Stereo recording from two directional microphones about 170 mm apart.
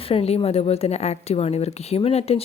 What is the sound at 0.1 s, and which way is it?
Speech, 35° left (ahead or behind).